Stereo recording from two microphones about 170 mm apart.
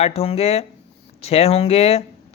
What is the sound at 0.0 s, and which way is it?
Speech, 35° left (ahead or behind).